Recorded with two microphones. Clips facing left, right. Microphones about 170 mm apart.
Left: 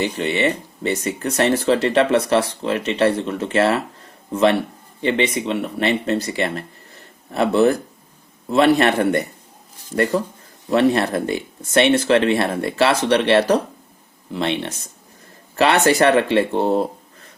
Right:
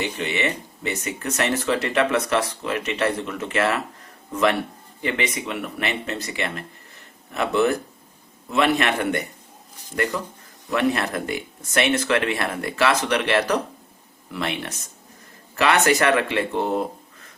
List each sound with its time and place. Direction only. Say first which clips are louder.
0.0 s speech: left 5 dB; 35° left (ahead or behind)